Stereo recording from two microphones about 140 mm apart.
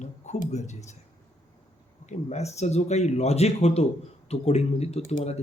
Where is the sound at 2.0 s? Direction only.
50° left (ahead or behind).